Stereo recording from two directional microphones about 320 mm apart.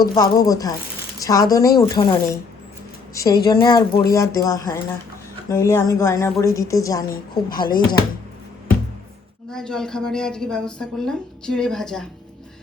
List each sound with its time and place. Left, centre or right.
0.0 s speech: centre
3.5 s speech: centre
7.1 s a woman's voice: left
7.7 s speech: centre
9.5 s a woman's voice: centre